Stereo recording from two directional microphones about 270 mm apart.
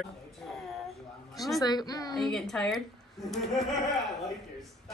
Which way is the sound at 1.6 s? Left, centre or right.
Centre.